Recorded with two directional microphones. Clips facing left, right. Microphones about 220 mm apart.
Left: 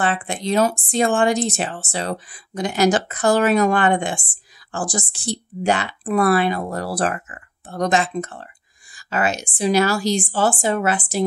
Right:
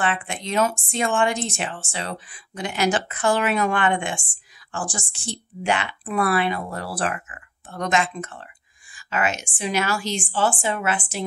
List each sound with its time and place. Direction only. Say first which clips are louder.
0.0 s speech: left 4 dB; 35° left (ahead or behind)